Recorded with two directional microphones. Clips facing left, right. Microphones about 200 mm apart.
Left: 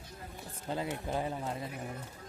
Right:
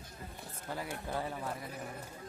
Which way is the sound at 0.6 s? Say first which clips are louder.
Left 4 dB; 25° left (ahead or behind).